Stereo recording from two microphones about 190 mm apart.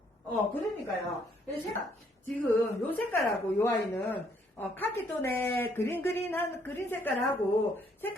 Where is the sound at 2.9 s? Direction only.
10° left (ahead or behind).